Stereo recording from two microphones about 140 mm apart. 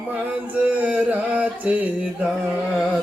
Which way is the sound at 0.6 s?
10° right (ahead or behind).